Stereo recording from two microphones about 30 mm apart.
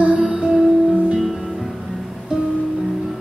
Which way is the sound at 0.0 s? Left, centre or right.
Right.